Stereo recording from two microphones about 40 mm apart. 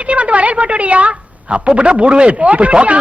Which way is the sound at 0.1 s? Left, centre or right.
Right.